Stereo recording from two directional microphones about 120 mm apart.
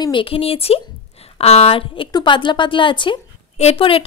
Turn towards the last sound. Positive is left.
turn(degrees=50)  # may be behind; listen again after turning